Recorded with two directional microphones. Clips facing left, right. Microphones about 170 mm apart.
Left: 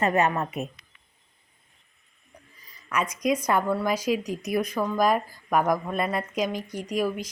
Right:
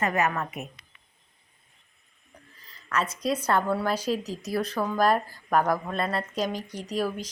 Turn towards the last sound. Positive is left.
turn(degrees=10)  # may be behind; listen again after turning